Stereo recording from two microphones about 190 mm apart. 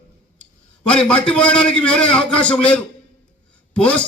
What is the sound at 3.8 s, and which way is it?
Speech, 5° left (ahead or behind).